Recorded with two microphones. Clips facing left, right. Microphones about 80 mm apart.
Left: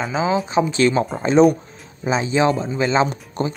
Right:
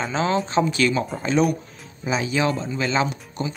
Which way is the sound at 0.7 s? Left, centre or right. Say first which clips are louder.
Left 4 dB; left.